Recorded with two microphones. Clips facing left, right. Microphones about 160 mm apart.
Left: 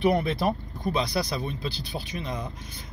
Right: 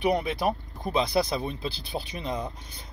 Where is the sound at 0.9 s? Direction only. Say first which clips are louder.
Right 4 dB; 25° right (ahead or behind).